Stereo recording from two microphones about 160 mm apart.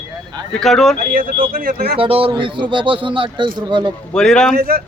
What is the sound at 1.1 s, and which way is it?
Speech, 60° right (ahead or behind).